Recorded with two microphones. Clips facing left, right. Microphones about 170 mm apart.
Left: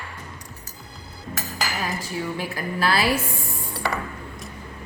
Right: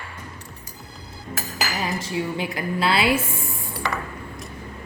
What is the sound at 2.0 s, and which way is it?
Speech, 25° right (ahead or behind).